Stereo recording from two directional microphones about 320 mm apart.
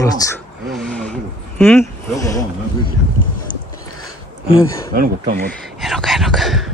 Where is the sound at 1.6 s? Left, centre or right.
Centre.